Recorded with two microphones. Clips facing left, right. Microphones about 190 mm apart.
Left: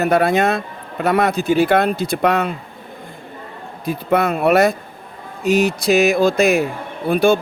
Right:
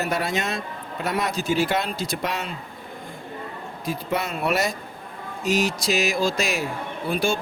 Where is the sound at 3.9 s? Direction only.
60° left (ahead or behind).